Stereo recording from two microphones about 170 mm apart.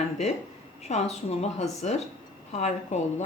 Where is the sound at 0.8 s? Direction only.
40° left (ahead or behind).